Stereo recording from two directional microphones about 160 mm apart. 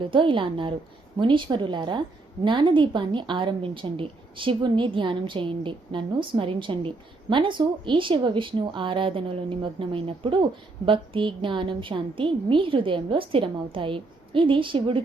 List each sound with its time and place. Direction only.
0.0 s a woman's voice: 30° right (ahead or behind)